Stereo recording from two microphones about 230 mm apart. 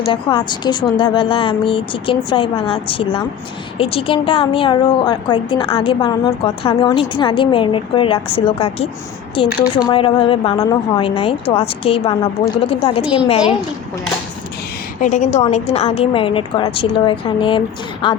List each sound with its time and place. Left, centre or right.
0.1 s a woman's voice: left
9.9 s a woman's voice: left
15.0 s a woman's voice: left